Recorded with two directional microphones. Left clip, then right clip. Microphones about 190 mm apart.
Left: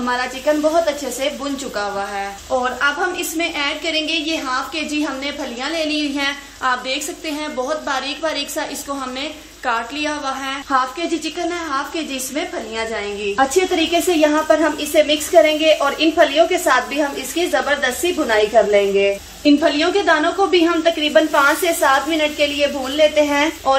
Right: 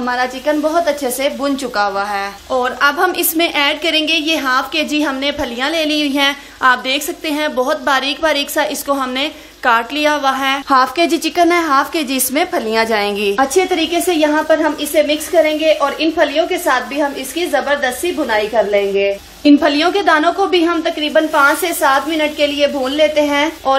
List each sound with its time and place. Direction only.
1.8 s a woman's voice: 55° right (ahead or behind); by 10.6 s 35° right (ahead or behind)
10.7 s a woman's voice: 55° right (ahead or behind); by 19.1 s 35° right (ahead or behind)
19.4 s a woman's voice: 45° right (ahead or behind)